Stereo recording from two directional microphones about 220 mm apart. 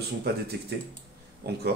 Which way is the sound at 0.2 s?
45° right (ahead or behind).